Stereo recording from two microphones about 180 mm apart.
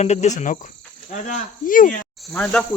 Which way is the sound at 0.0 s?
40° left (ahead or behind).